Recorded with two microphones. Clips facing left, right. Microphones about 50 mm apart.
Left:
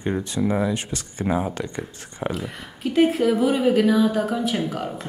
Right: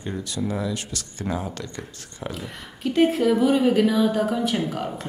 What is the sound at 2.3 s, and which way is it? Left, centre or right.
Speech, centre.